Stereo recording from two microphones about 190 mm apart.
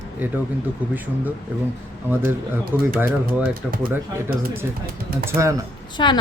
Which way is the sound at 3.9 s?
10° right (ahead or behind).